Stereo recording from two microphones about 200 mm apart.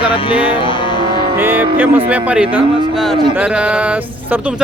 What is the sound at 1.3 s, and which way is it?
Speech, 10° right (ahead or behind).